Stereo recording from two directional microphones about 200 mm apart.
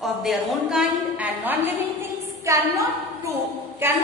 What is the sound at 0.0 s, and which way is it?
A woman's voice, centre (ahead or behind).